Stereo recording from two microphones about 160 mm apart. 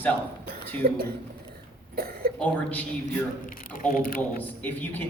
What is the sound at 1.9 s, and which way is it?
Cough, 70° right (ahead or behind).